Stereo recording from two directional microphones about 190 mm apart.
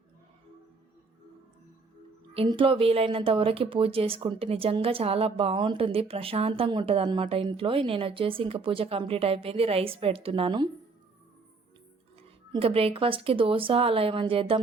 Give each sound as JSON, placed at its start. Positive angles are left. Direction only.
{"t": 2.3, "sound": "speech", "side_deg": -30}
{"t": 12.5, "sound": "speech", "side_deg": -30}